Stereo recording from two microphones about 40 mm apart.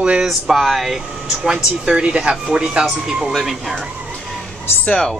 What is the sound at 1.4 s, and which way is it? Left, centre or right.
Speech, centre.